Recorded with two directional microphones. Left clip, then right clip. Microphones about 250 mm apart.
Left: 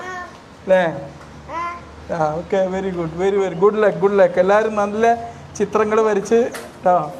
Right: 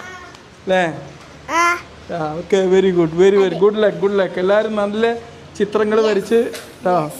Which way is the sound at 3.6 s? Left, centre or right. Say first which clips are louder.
Even; right.